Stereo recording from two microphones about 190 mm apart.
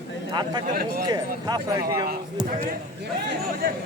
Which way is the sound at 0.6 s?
50° right (ahead or behind).